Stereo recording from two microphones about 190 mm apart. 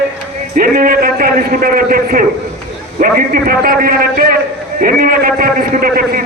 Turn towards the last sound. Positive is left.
turn(degrees=-45)  # may be behind; listen again after turning